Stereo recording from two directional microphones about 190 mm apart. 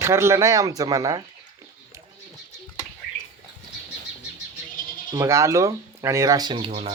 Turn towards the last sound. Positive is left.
turn(degrees=-30)  # may be behind; listen again after turning